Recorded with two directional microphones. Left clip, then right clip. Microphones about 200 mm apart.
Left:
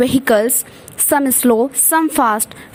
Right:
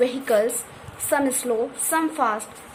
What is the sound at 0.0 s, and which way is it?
A woman's voice, 40° left (ahead or behind).